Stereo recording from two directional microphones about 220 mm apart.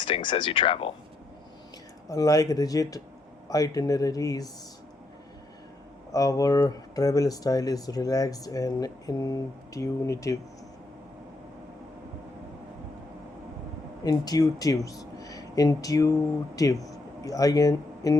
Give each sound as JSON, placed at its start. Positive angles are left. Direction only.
{"t": 0.0, "sound": "speech", "side_deg": 20}
{"t": 2.0, "sound": "speech", "side_deg": 15}
{"t": 6.1, "sound": "speech", "side_deg": 15}
{"t": 14.0, "sound": "speech", "side_deg": 15}